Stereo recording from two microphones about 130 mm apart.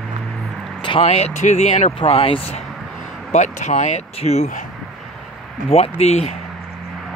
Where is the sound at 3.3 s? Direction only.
65° left (ahead or behind).